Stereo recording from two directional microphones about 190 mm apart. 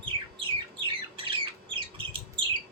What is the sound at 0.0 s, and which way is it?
Squawk, 25° right (ahead or behind).